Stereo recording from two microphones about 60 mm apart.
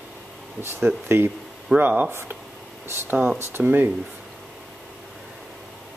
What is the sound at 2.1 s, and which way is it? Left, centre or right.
Speech, right.